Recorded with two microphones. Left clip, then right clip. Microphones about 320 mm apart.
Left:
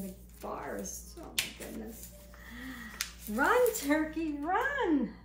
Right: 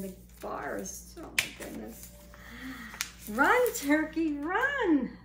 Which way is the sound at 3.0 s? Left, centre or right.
Centre.